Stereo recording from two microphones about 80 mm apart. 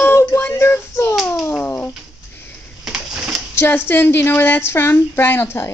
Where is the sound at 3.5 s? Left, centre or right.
Left.